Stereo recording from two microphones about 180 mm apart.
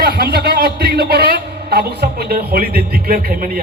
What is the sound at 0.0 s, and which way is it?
A man's voice, 60° right (ahead or behind).